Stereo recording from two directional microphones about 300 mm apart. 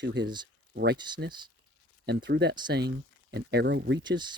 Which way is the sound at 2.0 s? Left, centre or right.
Right.